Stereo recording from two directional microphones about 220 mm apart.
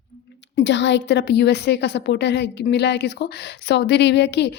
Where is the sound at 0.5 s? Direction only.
55° left (ahead or behind).